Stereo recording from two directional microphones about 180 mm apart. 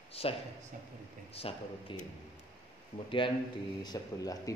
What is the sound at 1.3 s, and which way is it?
Speech, 30° left (ahead or behind).